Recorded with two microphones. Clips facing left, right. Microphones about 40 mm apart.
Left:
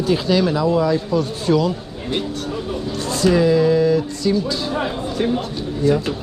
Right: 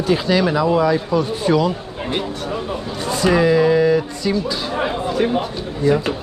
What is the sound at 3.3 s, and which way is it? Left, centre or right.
Speech, centre.